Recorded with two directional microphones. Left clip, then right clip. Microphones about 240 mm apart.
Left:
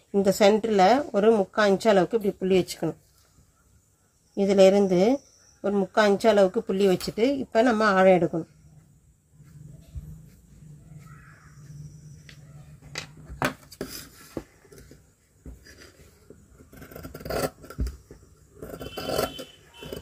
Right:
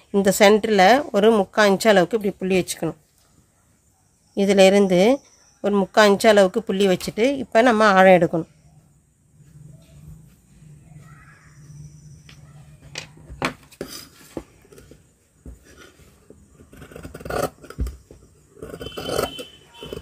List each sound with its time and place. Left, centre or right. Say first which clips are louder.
0.1 s speech: right 5 dB; right
4.4 s speech: right 3 dB; right